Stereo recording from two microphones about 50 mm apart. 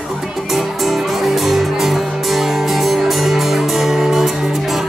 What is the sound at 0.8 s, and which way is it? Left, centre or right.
Music, centre.